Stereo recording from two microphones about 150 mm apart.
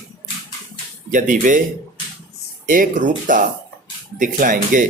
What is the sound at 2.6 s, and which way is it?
Speech, 60° right (ahead or behind).